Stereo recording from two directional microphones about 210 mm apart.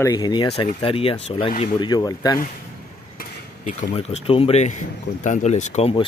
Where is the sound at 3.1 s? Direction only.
40° left (ahead or behind).